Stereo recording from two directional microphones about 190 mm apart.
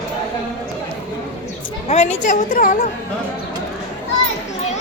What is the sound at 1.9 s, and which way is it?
A woman's voice, 40° left (ahead or behind).